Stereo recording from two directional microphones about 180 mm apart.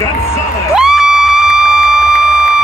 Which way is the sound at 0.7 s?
Centre (ahead or behind).